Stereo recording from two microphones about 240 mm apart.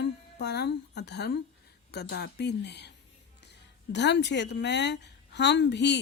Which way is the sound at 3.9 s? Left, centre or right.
Left.